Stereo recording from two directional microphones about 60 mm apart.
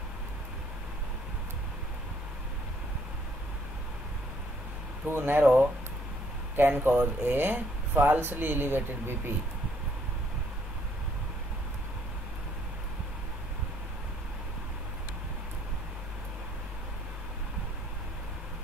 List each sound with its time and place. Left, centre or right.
5.0 s speech: right
5.4 s speech: right